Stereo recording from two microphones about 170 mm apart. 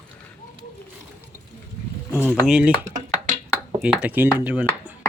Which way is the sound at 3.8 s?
10° right (ahead or behind).